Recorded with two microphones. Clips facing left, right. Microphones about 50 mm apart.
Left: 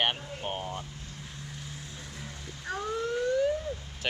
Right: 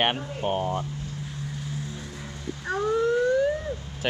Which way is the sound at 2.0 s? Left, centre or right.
Centre.